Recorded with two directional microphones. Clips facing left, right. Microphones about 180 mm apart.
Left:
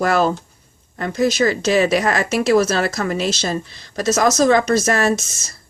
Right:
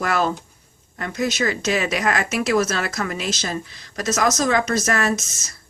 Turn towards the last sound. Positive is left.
turn(degrees=30)  # may be behind; listen again after turning